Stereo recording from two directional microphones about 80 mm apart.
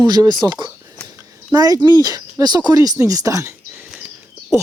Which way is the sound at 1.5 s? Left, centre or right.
Right.